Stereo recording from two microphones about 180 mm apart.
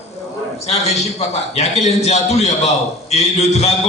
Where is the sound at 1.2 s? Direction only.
35° left (ahead or behind).